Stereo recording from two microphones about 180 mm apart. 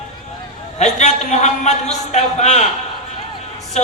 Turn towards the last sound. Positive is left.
turn(degrees=40)  # may be behind; listen again after turning